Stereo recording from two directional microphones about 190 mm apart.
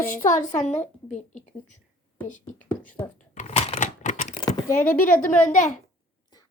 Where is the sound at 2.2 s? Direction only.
40° left (ahead or behind).